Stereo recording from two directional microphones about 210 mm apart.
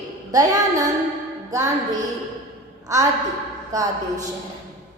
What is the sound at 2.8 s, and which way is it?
A woman's voice, 15° right (ahead or behind).